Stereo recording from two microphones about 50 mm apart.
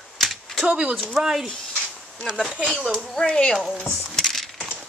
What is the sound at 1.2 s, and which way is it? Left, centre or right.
Speech, centre.